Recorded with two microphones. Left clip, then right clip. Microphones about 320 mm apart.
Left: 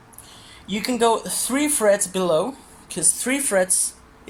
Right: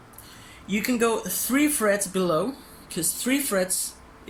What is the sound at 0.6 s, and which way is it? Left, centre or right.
Speech, centre.